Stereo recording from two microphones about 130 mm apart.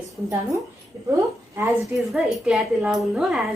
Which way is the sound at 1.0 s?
25° right (ahead or behind).